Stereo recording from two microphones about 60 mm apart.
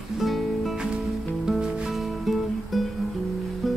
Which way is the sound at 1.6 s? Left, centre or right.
Centre.